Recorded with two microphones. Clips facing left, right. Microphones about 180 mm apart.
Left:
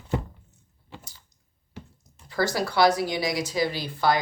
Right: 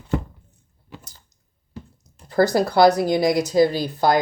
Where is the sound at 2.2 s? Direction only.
45° right (ahead or behind).